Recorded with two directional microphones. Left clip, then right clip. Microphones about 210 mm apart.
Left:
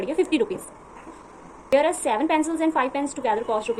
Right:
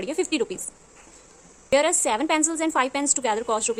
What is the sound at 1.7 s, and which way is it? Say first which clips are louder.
A woman's voice: left 1 dB; 45° right (ahead or behind).